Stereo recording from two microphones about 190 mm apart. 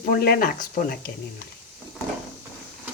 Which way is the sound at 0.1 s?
50° left (ahead or behind).